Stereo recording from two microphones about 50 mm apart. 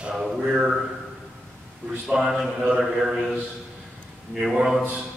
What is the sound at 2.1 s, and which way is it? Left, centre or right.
A man's voice, centre.